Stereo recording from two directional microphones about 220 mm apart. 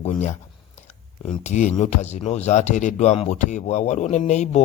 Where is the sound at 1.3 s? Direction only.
30° left (ahead or behind).